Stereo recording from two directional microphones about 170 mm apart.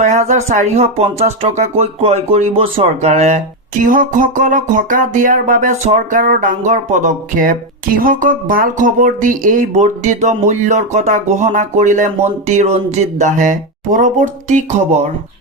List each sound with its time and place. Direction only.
0.0 s speech: 45° right (ahead or behind)